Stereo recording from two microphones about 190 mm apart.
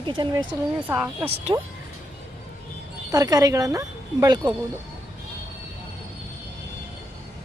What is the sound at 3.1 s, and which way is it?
Speech, 20° right (ahead or behind).